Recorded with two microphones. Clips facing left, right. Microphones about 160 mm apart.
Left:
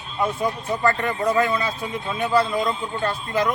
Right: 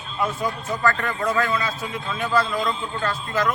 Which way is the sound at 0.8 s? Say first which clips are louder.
Left 1 dB; 25° left (ahead or behind).